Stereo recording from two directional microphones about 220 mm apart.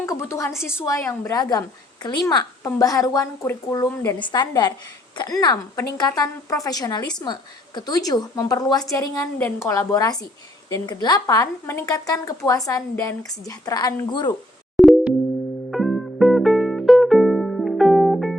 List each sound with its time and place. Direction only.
0.0 s a woman's voice: 10° left (ahead or behind)
14.8 s music: centre (ahead or behind)